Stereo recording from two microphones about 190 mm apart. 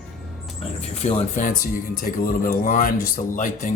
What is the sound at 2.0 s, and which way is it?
Speech, 50° left (ahead or behind).